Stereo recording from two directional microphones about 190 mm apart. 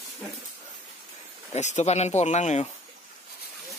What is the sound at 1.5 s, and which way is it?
Speech, 35° left (ahead or behind).